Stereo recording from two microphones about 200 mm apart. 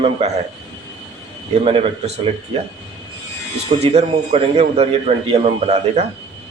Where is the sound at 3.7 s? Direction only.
30° right (ahead or behind).